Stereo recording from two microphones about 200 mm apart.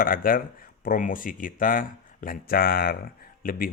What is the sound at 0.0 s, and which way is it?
Speech, 45° left (ahead or behind).